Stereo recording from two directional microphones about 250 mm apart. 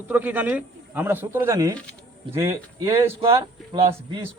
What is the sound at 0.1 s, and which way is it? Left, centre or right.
Speech, centre.